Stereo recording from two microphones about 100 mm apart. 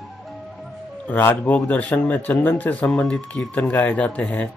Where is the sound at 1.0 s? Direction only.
15° left (ahead or behind).